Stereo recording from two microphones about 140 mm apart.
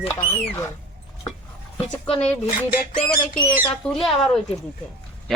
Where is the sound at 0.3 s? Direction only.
20° left (ahead or behind).